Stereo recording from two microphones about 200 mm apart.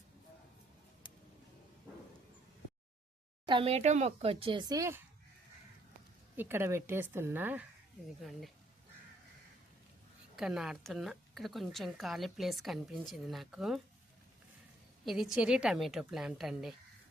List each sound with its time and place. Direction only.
3.4 s speech: 25° right (ahead or behind)
6.3 s a woman's voice: 10° right (ahead or behind)
8.2 s a woman's voice: centre (ahead or behind)
10.3 s a woman's voice: centre (ahead or behind)
15.0 s a woman's voice: centre (ahead or behind)